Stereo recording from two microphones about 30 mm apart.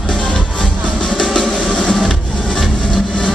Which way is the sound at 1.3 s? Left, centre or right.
Left.